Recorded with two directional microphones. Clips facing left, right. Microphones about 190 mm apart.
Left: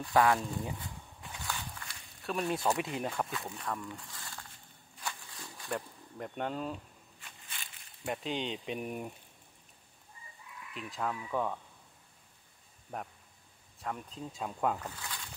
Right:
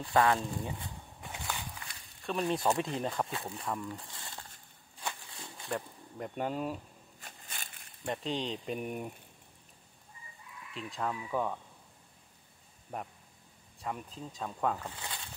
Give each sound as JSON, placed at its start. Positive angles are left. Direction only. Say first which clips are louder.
{"t": 0.1, "sound": "speech", "louder": "even", "side_deg": 5}
{"t": 1.2, "sound": "walk", "louder": "right 1 dB", "side_deg": -20}
{"t": 2.2, "sound": "speech", "louder": "right 1 dB", "side_deg": 0}
{"t": 3.3, "sound": "speech", "louder": "right 1 dB", "side_deg": -30}
{"t": 3.9, "sound": "crumpling", "louder": "right 2 dB", "side_deg": -30}
{"t": 4.9, "sound": "a sound", "louder": "right 2 dB", "side_deg": -30}
{"t": 5.7, "sound": "speech", "louder": "right 1 dB", "side_deg": 0}
{"t": 7.2, "sound": "a sound", "louder": "right 3 dB", "side_deg": -40}
{"t": 8.0, "sound": "speech", "louder": "right 1 dB", "side_deg": 5}
{"t": 10.7, "sound": "speech", "louder": "right 1 dB", "side_deg": 0}
{"t": 12.9, "sound": "speech", "louder": "right 1 dB", "side_deg": 0}
{"t": 15.0, "sound": "a sound", "louder": "right 1 dB", "side_deg": -25}